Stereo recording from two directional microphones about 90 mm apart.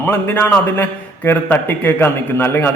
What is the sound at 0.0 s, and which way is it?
A man's voice, 20° left (ahead or behind).